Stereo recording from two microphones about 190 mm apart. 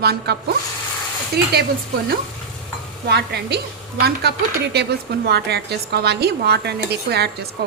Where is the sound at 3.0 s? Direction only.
60° right (ahead or behind).